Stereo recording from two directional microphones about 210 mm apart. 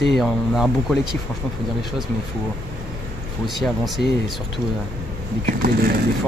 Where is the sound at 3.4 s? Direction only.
Centre (ahead or behind).